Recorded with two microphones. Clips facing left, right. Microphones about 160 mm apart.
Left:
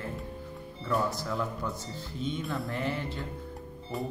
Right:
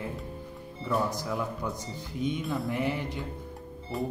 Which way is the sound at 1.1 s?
15° right (ahead or behind).